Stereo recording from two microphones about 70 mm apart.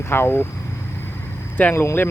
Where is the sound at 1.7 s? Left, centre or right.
Left.